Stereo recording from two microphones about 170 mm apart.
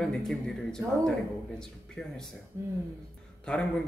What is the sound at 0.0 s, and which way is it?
Speech, centre (ahead or behind).